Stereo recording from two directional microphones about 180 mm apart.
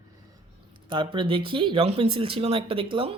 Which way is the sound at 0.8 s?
25° right (ahead or behind).